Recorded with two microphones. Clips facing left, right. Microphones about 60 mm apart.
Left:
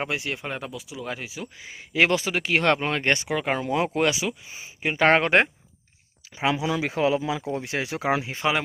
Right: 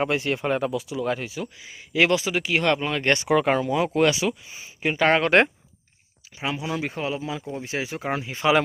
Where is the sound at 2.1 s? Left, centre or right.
Left.